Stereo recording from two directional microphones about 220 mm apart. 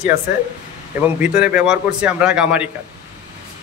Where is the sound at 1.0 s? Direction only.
5° right (ahead or behind).